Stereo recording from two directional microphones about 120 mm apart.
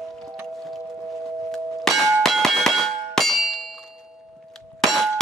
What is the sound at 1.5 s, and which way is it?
Clang, centre (ahead or behind).